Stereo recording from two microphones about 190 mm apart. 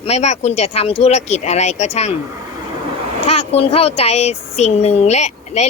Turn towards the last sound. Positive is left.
turn(degrees=35)  # may be behind; listen again after turning